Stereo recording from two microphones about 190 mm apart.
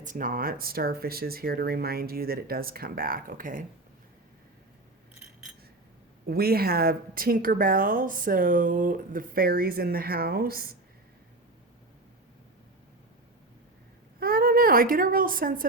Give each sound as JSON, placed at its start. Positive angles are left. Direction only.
{"t": 0.0, "sound": "speech", "side_deg": -45}
{"t": 6.2, "sound": "speech", "side_deg": -55}
{"t": 14.2, "sound": "a woman's voice", "side_deg": -50}